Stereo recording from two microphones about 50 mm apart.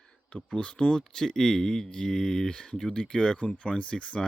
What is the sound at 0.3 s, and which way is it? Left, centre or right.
Speech, left.